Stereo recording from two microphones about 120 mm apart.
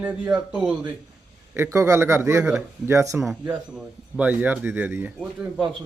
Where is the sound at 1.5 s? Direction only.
20° right (ahead or behind).